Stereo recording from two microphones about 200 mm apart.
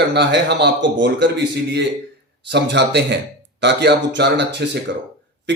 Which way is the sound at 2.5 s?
60° right (ahead or behind).